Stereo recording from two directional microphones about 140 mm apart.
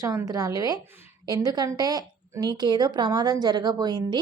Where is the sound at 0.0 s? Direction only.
25° right (ahead or behind).